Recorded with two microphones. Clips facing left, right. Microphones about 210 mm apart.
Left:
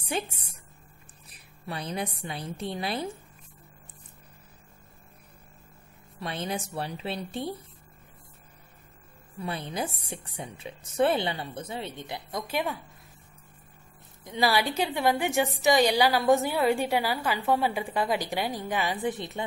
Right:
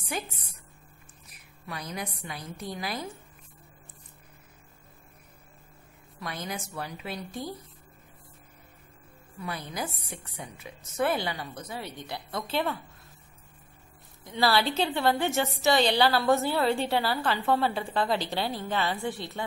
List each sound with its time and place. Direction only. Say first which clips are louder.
1.3 s a woman's voice: left 3 dB; 30° left (ahead or behind)
6.1 s a woman's voice: left 4 dB; 30° left (ahead or behind)
9.4 s a woman's voice: left 3 dB; 30° left (ahead or behind)
14.2 s a woman's voice: even; 15° left (ahead or behind)